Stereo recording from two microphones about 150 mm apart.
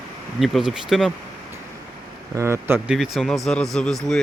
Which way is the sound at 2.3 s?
20° right (ahead or behind).